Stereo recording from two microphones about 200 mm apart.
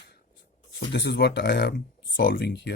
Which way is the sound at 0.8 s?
60° left (ahead or behind).